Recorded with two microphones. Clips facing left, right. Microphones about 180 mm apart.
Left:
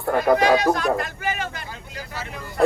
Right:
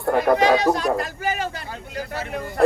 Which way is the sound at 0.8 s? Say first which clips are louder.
Even; 35° right (ahead or behind).